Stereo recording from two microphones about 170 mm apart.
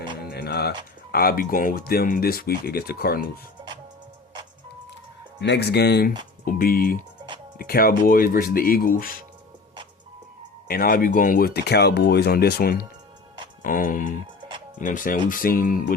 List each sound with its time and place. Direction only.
0.3 s music: 75° left (ahead or behind)
1.1 s speech: 60° left (ahead or behind)
5.4 s speech: 80° left
6.4 s speech: 60° left (ahead or behind)
10.7 s speech: 60° left (ahead or behind)
13.6 s speech: 50° left (ahead or behind)